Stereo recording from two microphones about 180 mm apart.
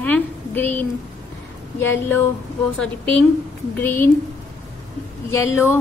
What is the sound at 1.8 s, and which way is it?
A woman's voice, 10° left (ahead or behind).